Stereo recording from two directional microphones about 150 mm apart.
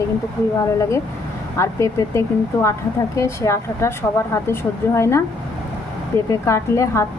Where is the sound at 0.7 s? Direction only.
20° left (ahead or behind).